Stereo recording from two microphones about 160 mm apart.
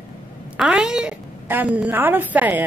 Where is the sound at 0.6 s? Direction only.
5° right (ahead or behind).